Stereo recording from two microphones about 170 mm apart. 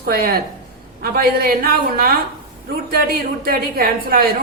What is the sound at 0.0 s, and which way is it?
A woman's voice, 65° right (ahead or behind).